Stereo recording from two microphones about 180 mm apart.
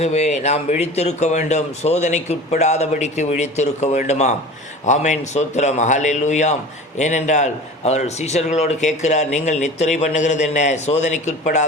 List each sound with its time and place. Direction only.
0.0 s a man's voice: 40° left (ahead or behind)